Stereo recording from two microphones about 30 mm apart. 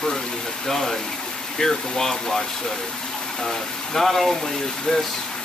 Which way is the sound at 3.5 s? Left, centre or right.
Centre.